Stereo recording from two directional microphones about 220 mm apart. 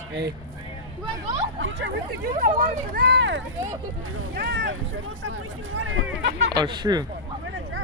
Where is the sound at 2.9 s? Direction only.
45° right (ahead or behind).